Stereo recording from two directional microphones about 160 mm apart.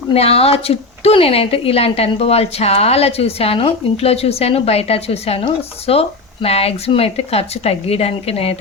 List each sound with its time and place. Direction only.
0.1 s speech: 40° left (ahead or behind)